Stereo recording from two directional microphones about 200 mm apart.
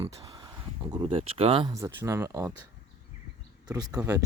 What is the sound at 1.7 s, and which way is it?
Speech, 15° right (ahead or behind).